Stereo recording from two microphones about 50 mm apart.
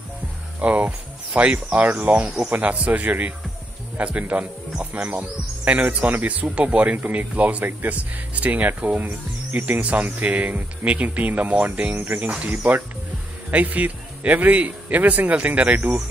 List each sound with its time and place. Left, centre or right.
0.6 s speech: right